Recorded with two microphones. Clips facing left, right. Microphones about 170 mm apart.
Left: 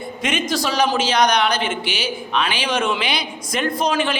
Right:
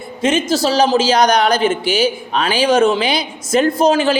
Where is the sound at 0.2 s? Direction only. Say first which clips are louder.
Right 7 dB; 30° right (ahead or behind).